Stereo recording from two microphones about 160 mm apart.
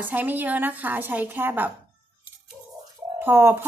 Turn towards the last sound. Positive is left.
turn(degrees=-15)  # may be behind; listen again after turning